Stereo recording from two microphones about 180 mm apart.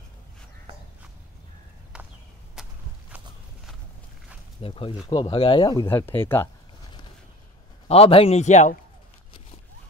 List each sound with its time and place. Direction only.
1.9 s a sound: 5° right (ahead or behind)
2.6 s walk: centre (ahead or behind)
4.6 s a man's voice: 30° left (ahead or behind)
5.9 s speech: 10° left (ahead or behind)
7.9 s a man's voice: 35° left (ahead or behind)